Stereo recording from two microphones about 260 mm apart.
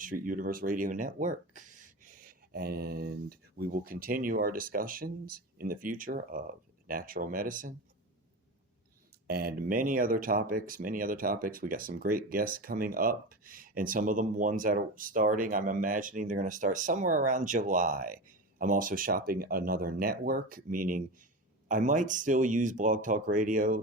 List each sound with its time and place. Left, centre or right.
0.0 s speech: right
9.2 s speech: right